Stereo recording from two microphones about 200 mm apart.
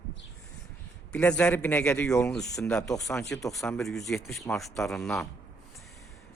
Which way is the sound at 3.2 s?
15° left (ahead or behind).